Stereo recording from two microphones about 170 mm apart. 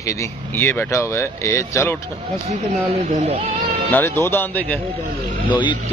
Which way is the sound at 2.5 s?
40° right (ahead or behind).